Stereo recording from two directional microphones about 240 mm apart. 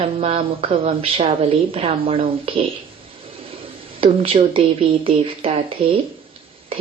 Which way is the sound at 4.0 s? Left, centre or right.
Right.